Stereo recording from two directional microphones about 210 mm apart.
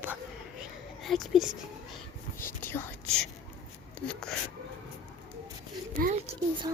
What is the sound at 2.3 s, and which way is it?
Whispering, 10° left (ahead or behind).